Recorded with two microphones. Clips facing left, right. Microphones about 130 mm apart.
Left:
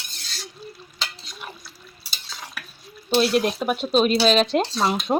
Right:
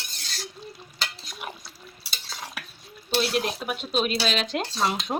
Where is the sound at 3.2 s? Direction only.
45° left (ahead or behind).